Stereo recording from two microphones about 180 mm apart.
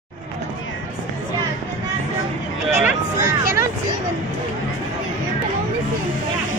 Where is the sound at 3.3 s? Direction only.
15° right (ahead or behind).